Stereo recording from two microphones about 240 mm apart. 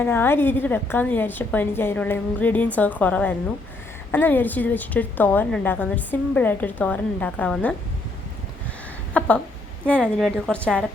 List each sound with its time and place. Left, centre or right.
0.0 s a woman's voice: centre
9.1 s a woman's voice: centre